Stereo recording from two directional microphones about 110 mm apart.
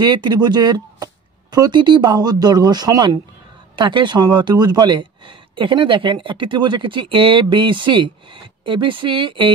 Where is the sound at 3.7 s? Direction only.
45° right (ahead or behind).